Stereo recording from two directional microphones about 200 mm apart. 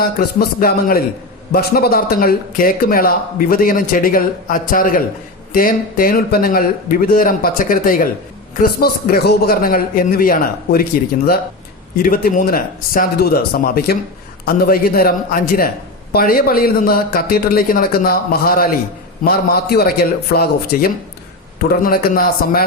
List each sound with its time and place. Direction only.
0.0 s a man's voice: 50° left (ahead or behind)